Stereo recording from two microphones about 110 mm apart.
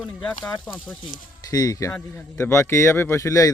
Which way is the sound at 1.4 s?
35° left (ahead or behind).